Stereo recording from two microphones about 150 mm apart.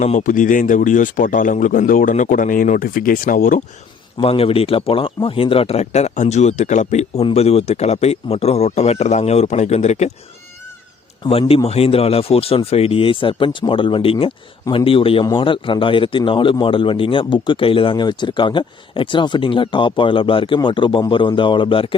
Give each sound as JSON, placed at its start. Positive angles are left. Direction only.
{"t": 0.0, "sound": "a man's voice", "side_deg": 55}
{"t": 4.2, "sound": "speech", "side_deg": 40}
{"t": 11.2, "sound": "a man's voice", "side_deg": 40}